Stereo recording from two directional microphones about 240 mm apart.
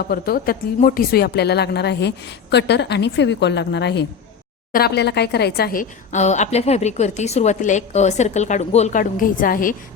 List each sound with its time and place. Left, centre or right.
0.1 s a woman's voice: left